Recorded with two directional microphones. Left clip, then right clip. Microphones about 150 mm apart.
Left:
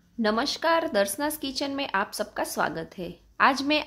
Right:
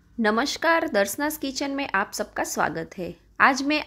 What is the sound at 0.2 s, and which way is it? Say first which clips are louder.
A woman's voice: right 2 dB; 25° right (ahead or behind).